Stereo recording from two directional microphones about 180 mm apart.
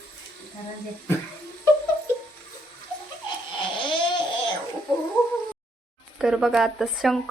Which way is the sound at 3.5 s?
30° left (ahead or behind).